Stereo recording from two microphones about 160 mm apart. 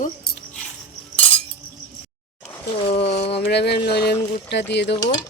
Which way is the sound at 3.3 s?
90° left.